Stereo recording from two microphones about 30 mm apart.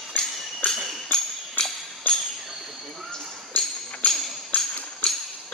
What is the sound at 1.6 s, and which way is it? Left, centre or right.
Music, left.